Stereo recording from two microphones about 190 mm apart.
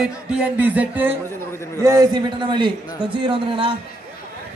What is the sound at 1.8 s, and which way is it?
Speech, 20° right (ahead or behind).